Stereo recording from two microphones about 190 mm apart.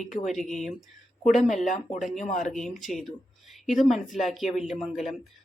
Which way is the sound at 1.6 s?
40° left (ahead or behind).